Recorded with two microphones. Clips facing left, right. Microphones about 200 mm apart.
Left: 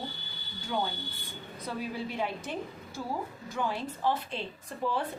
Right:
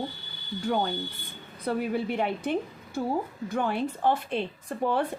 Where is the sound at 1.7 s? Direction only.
60° right (ahead or behind).